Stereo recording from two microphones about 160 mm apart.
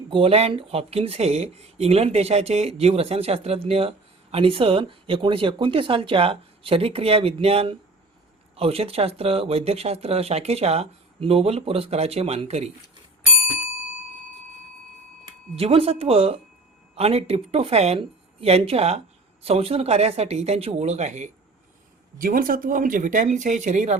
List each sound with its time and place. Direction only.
0.1 s speech: 35° right (ahead or behind)
15.5 s speech: 35° right (ahead or behind)
22.2 s speech: 60° right (ahead or behind)